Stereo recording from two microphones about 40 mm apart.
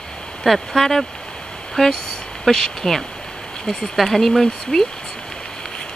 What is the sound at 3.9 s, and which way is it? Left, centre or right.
Speech, centre.